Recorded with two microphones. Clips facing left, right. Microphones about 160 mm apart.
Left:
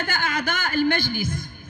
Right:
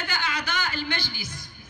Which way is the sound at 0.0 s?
50° left (ahead or behind).